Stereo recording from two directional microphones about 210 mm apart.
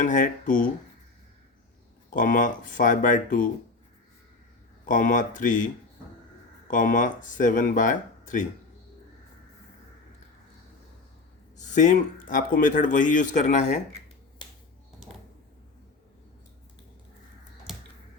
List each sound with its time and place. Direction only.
0.0 s speech: 40° left (ahead or behind)
2.1 s speech: 40° left (ahead or behind)
4.9 s speech: 40° left (ahead or behind)
11.5 s speech: 35° left (ahead or behind)
17.7 s a sound: centre (ahead or behind)